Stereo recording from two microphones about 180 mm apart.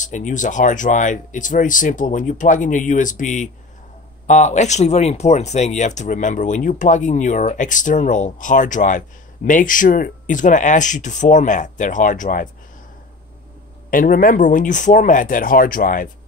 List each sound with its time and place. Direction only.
0.0 s speech: 45° left (ahead or behind)
13.8 s speech: 50° left (ahead or behind)